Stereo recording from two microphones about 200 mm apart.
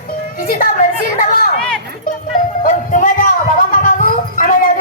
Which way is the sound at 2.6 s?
40° left (ahead or behind).